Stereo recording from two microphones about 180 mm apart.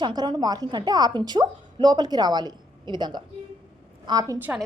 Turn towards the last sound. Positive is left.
turn(degrees=-20)  # may be behind; listen again after turning